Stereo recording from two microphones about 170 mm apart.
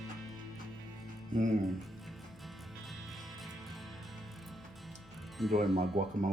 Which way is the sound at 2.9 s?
Centre (ahead or behind).